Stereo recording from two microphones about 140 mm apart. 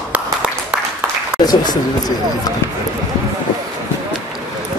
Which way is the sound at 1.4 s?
30° left (ahead or behind).